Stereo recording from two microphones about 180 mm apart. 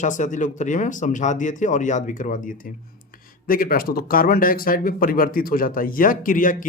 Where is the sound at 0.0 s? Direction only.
45° left (ahead or behind).